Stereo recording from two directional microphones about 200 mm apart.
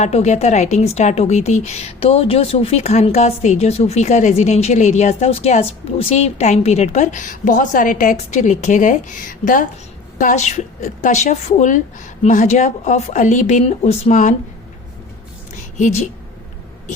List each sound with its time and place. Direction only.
0.0 s a woman's voice: 35° left (ahead or behind)